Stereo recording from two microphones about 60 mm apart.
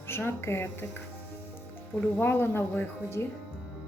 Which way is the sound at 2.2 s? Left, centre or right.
Left.